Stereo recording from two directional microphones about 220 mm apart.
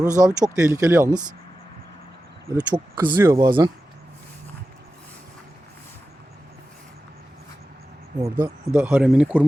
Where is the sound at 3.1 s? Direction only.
10° right (ahead or behind).